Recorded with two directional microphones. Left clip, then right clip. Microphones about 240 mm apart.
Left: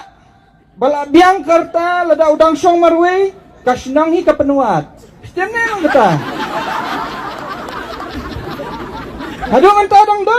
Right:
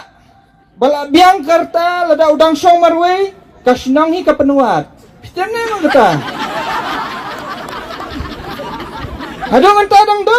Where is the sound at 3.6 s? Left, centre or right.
Centre.